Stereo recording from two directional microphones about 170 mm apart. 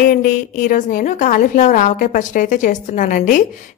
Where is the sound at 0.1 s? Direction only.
55° left (ahead or behind).